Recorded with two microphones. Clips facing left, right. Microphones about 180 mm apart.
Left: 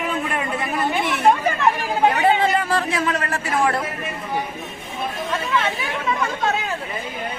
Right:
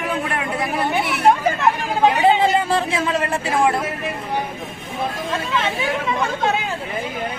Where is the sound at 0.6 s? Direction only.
10° right (ahead or behind).